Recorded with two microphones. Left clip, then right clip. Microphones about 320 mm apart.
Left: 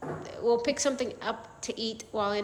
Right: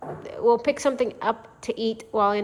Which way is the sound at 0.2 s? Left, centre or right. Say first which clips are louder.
Right 6 dB; centre.